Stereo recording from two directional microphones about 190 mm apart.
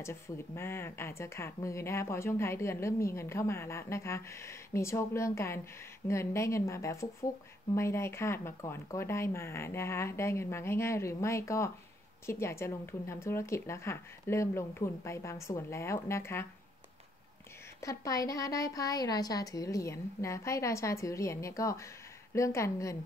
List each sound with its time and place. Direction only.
0.0 s a woman's voice: 15° left (ahead or behind)
17.7 s a woman's voice: 15° left (ahead or behind)